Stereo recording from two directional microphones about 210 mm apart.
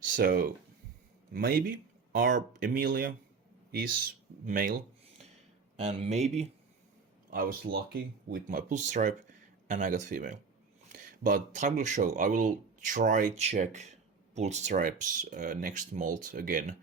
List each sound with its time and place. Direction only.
0.0 s speech: 40° right (ahead or behind)
5.7 s speech: 35° right (ahead or behind)
7.3 s speech: 40° right (ahead or behind)